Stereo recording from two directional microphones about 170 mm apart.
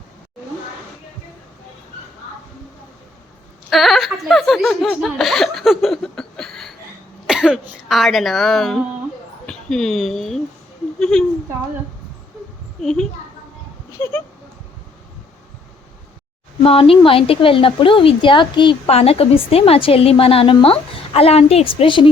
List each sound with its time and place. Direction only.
3.7 s a woman's voice: centre (ahead or behind)
12.8 s speech: 5° left (ahead or behind)
16.6 s a woman's voice: 35° left (ahead or behind)